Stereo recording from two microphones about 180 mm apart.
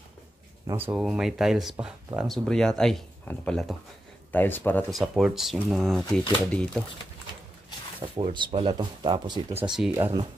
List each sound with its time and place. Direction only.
0.7 s speech: 10° right (ahead or behind); by 4.8 s 10° left (ahead or behind)
4.9 s speech: centre (ahead or behind)
8.2 s speech: 25° right (ahead or behind)